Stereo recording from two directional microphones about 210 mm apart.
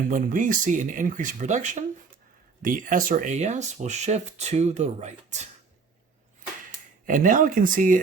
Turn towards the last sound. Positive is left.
turn(degrees=-40)  # may be behind; listen again after turning